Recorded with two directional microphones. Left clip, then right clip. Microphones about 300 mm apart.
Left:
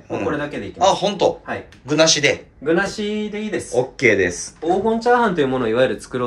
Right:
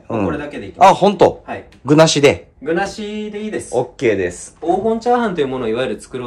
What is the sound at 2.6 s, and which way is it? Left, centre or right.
Speech, centre.